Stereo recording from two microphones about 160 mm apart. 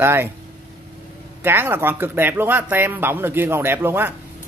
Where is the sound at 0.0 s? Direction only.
15° right (ahead or behind).